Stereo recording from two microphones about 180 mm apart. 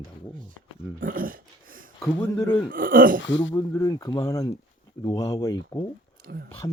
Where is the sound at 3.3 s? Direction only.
90° left.